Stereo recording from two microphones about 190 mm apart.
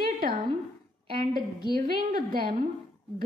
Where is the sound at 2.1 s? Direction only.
50° right (ahead or behind).